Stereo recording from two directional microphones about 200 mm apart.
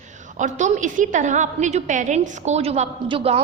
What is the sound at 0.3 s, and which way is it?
A woman's voice, 40° right (ahead or behind).